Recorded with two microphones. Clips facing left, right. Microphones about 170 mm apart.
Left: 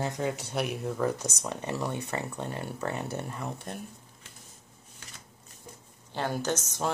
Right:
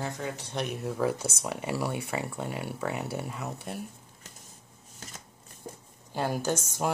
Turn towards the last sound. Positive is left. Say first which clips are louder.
# right 1 dB
turn(degrees=-10)  # may be behind; listen again after turning